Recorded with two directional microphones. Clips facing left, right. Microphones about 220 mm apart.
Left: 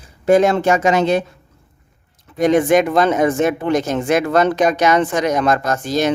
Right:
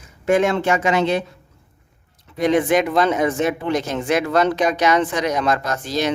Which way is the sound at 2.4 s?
45° left (ahead or behind).